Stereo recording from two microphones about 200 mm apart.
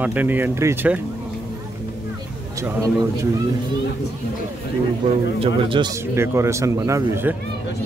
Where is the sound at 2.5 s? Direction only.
15° right (ahead or behind).